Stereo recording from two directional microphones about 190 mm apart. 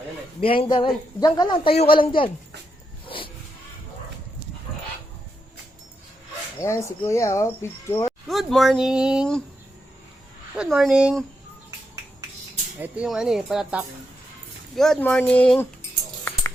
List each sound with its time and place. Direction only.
0.4 s a man's voice: 30° left (ahead or behind)
3.1 s a sound: 25° left (ahead or behind)
6.6 s speech: 15° left (ahead or behind)
8.3 s speech: centre (ahead or behind)
10.5 s speech: 5° right (ahead or behind)
12.8 s speech: 5° right (ahead or behind)